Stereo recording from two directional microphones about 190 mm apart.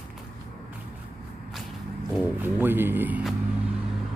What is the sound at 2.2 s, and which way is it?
Speech, 10° right (ahead or behind).